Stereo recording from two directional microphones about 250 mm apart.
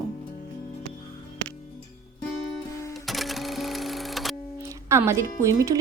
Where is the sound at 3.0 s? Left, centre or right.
Centre.